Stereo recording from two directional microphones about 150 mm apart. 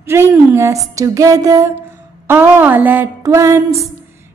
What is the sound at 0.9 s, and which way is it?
Female singing, 20° right (ahead or behind).